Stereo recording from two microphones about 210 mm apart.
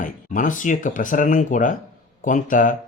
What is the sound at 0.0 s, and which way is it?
Speech, 40° left (ahead or behind).